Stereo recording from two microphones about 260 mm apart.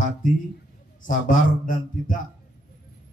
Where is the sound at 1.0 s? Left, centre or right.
Left.